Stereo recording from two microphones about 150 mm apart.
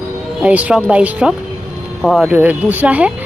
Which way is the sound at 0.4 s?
10° right (ahead or behind).